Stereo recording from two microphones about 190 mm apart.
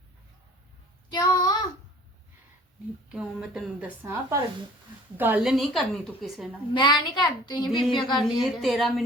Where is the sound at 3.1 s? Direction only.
5° right (ahead or behind).